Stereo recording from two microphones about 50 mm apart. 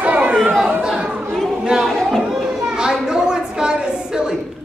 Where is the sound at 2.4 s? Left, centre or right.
Centre.